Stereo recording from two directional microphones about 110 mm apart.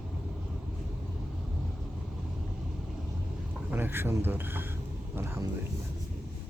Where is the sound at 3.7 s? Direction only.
20° right (ahead or behind).